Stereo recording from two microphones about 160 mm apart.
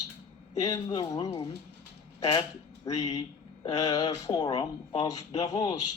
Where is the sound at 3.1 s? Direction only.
40° left (ahead or behind).